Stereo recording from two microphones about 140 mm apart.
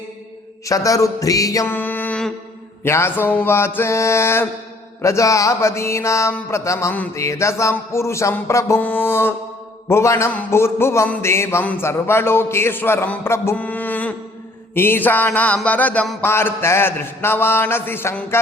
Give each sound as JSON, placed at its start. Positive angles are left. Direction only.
{"t": 0.6, "sound": "music", "side_deg": 25}
{"t": 2.8, "sound": "mantra", "side_deg": 15}
{"t": 5.0, "sound": "a sound", "side_deg": 20}
{"t": 9.9, "sound": "mantra", "side_deg": 20}